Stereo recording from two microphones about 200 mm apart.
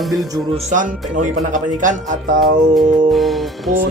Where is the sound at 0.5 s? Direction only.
40° right (ahead or behind).